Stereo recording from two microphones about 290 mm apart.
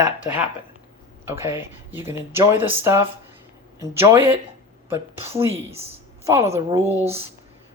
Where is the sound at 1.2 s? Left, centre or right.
Centre.